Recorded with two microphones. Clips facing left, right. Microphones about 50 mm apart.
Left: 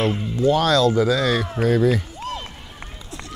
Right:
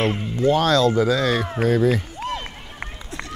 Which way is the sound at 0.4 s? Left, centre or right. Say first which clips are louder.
Even; right.